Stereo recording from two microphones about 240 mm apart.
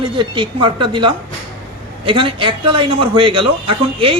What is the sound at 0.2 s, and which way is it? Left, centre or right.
A man's voice, centre.